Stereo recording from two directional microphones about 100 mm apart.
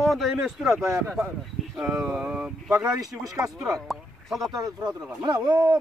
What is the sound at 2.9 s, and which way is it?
Speech, 35° right (ahead or behind).